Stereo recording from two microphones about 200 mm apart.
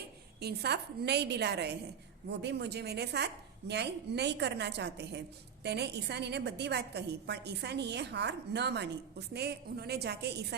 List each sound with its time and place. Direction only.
0.3 s a woman's voice: 55° right (ahead or behind)